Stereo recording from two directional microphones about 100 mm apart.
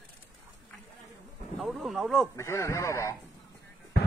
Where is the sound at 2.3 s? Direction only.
30° left (ahead or behind).